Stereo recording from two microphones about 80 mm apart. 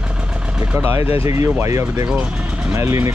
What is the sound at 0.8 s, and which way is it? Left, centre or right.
Speech, right.